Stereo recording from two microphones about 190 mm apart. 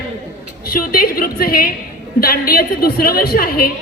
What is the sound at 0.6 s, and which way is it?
A woman's voice, 50° left (ahead or behind).